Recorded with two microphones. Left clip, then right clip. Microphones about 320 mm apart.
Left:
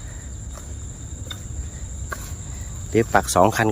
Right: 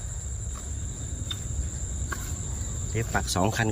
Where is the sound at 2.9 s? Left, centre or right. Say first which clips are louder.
Left 11 dB; centre.